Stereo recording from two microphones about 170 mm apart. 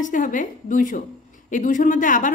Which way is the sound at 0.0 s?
50° left (ahead or behind).